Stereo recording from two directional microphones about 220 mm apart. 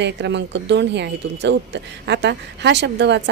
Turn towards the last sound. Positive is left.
turn(degrees=-50)  # may be behind; listen again after turning